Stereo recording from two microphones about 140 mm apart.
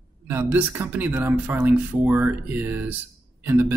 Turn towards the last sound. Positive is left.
turn(degrees=-15)  # may be behind; listen again after turning